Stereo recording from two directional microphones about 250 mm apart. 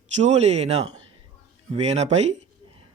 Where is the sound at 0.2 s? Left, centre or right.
Right.